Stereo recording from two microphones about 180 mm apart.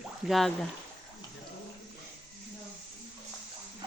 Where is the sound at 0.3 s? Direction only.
Centre (ahead or behind).